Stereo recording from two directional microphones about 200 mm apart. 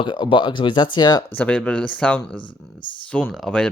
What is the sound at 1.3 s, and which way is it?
Speech, 5° left (ahead or behind).